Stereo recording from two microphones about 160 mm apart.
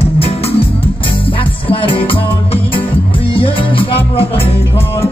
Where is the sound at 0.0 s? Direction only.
35° left (ahead or behind).